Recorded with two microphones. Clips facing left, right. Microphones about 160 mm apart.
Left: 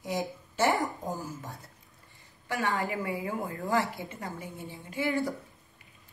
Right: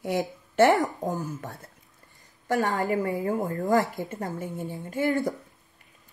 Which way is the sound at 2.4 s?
40° right (ahead or behind).